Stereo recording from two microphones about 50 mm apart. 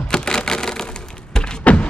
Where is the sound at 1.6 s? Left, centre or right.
Left.